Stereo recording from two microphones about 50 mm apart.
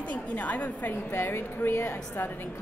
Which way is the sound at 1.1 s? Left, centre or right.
Left.